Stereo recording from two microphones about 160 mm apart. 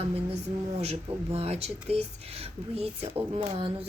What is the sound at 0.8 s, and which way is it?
Speech, 40° right (ahead or behind).